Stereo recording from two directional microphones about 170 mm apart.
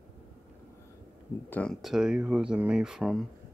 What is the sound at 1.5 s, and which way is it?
Speech, 5° left (ahead or behind).